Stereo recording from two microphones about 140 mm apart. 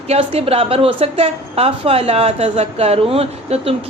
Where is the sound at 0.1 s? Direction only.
45° right (ahead or behind).